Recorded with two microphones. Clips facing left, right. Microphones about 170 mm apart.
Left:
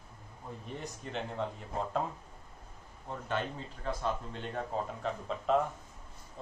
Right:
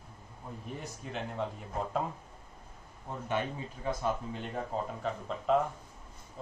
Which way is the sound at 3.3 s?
10° right (ahead or behind).